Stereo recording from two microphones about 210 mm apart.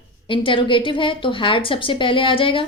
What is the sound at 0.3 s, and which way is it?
A woman's voice, 25° left (ahead or behind).